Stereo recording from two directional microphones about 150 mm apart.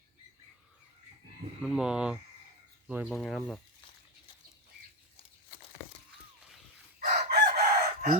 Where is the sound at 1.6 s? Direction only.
5° right (ahead or behind).